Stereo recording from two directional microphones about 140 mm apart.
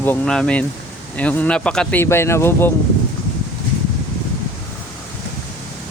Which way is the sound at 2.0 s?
20° left (ahead or behind).